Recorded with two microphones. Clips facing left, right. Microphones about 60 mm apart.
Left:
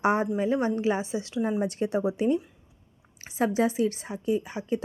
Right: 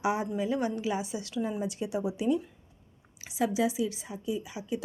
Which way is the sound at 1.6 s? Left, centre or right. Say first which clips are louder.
Left 5 dB; left.